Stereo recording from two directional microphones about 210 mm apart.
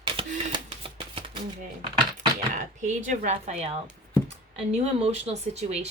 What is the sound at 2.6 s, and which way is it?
Speech, 35° right (ahead or behind).